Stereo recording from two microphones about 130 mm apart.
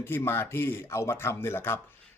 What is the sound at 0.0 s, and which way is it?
Speech, 20° left (ahead or behind).